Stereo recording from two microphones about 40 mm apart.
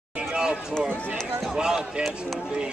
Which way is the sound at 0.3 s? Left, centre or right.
Right.